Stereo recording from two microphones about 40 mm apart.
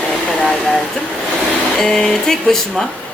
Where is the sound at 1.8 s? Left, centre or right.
Centre.